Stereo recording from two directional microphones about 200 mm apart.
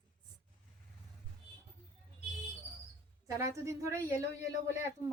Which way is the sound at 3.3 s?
15° right (ahead or behind).